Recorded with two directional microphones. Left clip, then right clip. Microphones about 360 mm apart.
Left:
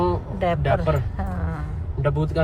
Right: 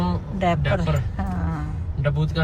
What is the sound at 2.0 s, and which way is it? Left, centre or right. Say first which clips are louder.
Speech: left 3 dB; left.